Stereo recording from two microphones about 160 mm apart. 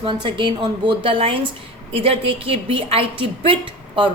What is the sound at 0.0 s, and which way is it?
A woman's voice, 30° right (ahead or behind).